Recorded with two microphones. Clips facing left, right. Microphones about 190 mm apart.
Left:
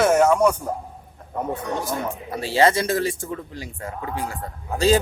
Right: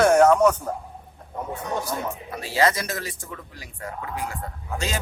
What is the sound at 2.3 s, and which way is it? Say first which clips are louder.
Speech: left 4 dB; 30° left (ahead or behind).